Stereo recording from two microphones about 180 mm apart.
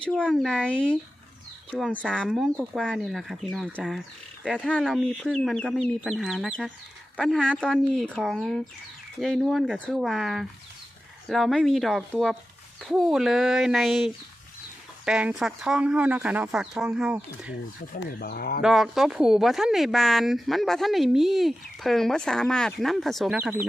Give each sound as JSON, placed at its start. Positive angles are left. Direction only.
{"t": 0.0, "sound": "speech", "side_deg": 5}
{"t": 2.0, "sound": "speech", "side_deg": 5}
{"t": 18.0, "sound": "speech", "side_deg": 60}
{"t": 18.6, "sound": "speech", "side_deg": 0}